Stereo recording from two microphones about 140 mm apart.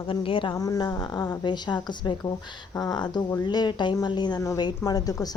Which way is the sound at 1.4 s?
30° left (ahead or behind).